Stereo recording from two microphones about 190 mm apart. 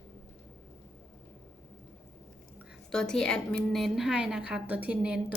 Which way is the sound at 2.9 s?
5° left (ahead or behind).